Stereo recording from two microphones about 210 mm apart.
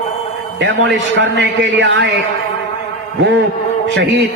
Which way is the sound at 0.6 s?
55° right (ahead or behind).